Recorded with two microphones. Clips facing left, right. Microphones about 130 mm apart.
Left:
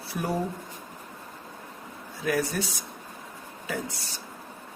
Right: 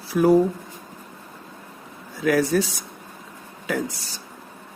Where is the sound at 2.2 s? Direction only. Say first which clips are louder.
Right 8 dB; 90° right.